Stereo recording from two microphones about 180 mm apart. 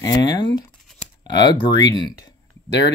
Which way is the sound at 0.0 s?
20° left (ahead or behind).